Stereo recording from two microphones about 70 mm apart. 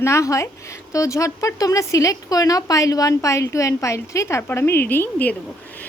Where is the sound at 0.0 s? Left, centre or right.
Left.